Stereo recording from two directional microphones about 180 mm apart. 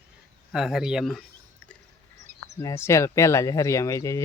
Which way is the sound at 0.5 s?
Centre (ahead or behind).